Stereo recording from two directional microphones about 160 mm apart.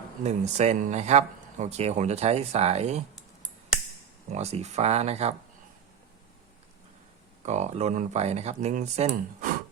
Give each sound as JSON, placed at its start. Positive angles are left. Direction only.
{"t": 0.3, "sound": "speech", "side_deg": -45}
{"t": 4.3, "sound": "speech", "side_deg": -45}
{"t": 7.4, "sound": "speech", "side_deg": -45}